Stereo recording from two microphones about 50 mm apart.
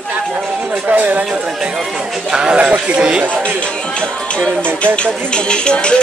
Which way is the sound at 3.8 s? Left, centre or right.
Centre.